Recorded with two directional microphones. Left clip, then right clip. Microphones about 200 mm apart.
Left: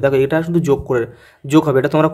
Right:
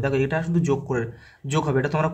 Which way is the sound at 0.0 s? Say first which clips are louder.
Left 9 dB; 40° left (ahead or behind).